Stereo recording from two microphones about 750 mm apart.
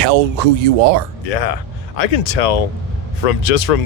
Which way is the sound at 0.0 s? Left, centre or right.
Right.